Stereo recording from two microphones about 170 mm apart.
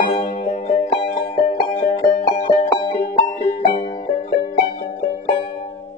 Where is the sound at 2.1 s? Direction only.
45° left (ahead or behind).